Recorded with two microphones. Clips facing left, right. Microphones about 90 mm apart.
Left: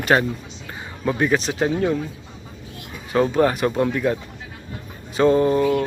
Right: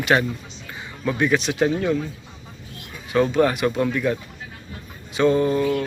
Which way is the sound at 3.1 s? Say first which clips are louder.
Left 1 dB; 30° left (ahead or behind).